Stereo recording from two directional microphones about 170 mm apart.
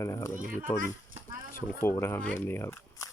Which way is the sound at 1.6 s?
15° left (ahead or behind).